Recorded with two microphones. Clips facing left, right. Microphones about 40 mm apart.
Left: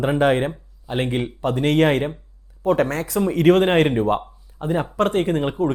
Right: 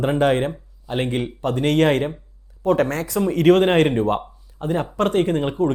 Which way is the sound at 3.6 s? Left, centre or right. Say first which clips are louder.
Right 1 dB; centre.